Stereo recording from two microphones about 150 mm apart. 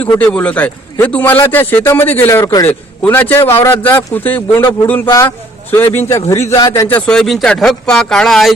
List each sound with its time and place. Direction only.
0.0 s a man's voice: 10° left (ahead or behind)
2.4 s a man's voice: 25° left (ahead or behind)
2.6 s a man's voice: 15° left (ahead or behind)
5.7 s a man's voice: 15° left (ahead or behind)
6.8 s speech: 10° left (ahead or behind)